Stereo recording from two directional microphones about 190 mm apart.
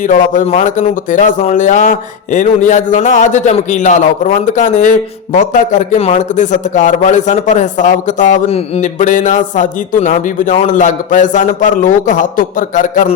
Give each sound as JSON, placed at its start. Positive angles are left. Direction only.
{"t": 0.0, "sound": "a man's voice", "side_deg": 45}